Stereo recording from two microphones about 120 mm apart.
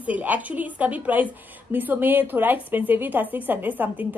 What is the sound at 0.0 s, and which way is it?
A woman's voice, 15° right (ahead or behind).